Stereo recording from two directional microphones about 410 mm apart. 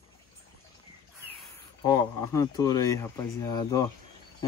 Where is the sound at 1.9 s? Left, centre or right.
Centre.